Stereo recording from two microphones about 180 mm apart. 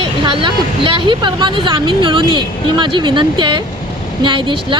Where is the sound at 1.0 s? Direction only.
25° right (ahead or behind).